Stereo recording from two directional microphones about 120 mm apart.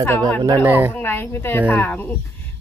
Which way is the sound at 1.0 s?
20° left (ahead or behind).